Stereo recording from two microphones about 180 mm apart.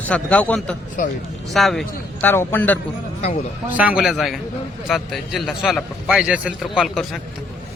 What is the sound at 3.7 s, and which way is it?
A man's voice, 10° right (ahead or behind).